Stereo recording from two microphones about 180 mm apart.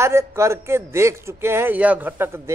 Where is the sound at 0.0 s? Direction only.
15° right (ahead or behind).